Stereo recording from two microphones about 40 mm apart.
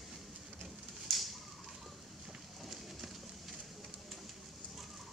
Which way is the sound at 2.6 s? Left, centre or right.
Centre.